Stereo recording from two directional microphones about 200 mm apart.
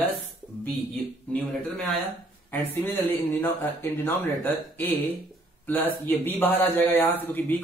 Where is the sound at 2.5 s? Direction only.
10° left (ahead or behind).